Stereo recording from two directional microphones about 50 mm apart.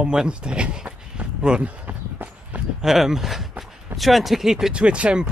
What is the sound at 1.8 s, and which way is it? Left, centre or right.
Walk, right.